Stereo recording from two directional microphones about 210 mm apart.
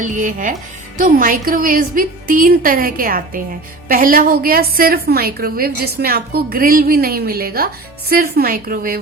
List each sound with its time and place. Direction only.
0.0 s a woman's voice: 35° right (ahead or behind)